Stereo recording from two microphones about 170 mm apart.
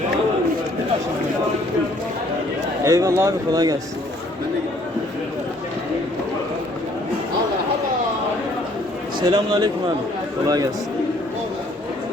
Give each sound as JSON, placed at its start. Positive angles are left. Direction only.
{"t": 2.8, "sound": "speech", "side_deg": -20}
{"t": 9.2, "sound": "speech", "side_deg": -25}